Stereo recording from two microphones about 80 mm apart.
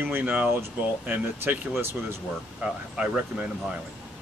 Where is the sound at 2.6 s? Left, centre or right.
Centre.